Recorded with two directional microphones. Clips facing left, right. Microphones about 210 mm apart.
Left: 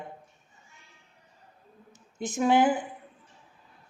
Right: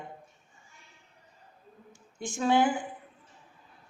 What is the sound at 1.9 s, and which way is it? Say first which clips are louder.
Speech: left 4 dB; 20° left (ahead or behind).